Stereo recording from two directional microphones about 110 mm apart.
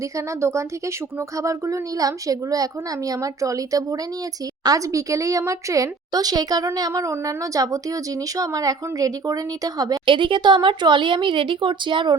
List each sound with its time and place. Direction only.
1.4 s a woman's voice: 30° right (ahead or behind)
10.1 s speech: 50° right (ahead or behind)